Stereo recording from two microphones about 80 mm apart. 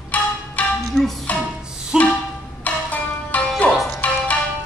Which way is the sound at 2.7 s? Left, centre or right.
Centre.